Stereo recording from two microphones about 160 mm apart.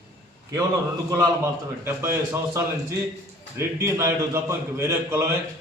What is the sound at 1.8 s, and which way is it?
A man's voice, 15° right (ahead or behind).